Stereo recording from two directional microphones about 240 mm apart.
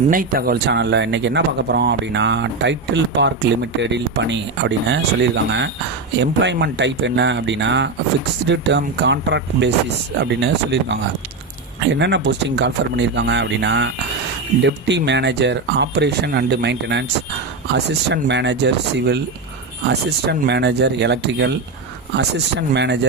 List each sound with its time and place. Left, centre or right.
0.1 s speech: right
11.9 s speech: right